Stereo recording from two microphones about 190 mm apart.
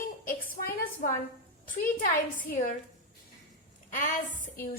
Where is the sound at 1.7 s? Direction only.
45° left (ahead or behind).